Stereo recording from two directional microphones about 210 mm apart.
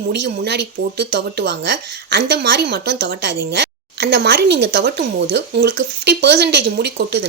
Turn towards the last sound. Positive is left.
turn(degrees=-55)  # may be behind; listen again after turning